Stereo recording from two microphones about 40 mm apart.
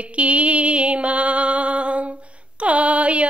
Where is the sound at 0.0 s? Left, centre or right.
Right.